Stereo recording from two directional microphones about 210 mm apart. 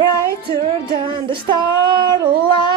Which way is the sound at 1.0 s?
25° right (ahead or behind).